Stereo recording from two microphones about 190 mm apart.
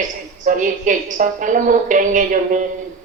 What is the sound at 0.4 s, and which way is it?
A woman's voice, 40° right (ahead or behind).